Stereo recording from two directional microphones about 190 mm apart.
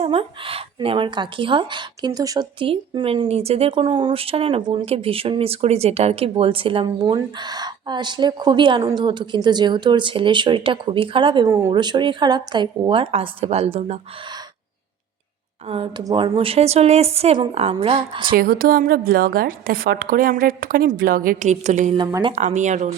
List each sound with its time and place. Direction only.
0.0 s speech: 30° right (ahead or behind)
15.7 s speech: 30° right (ahead or behind)
18.3 s a woman's voice: 50° right (ahead or behind)
21.9 s speech: 25° right (ahead or behind)
22.3 s speech: 40° right (ahead or behind)